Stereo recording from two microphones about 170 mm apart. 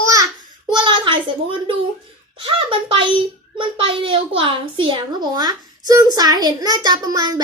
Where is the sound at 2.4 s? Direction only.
30° right (ahead or behind).